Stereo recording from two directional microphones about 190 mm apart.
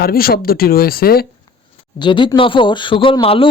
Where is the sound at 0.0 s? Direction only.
50° left (ahead or behind).